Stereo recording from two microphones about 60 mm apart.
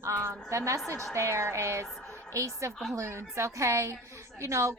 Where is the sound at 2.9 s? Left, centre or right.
Right.